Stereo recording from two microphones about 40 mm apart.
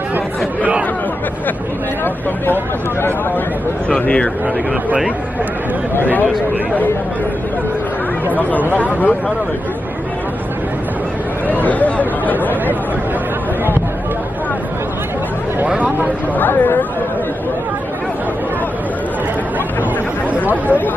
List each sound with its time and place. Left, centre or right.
0.6 s speech: right
5.9 s speech: left
8.3 s speech: left
11.6 s chatter: left
16.3 s speech: left
20.3 s speech: right